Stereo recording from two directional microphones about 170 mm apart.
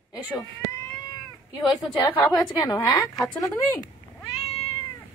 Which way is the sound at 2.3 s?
20° left (ahead or behind).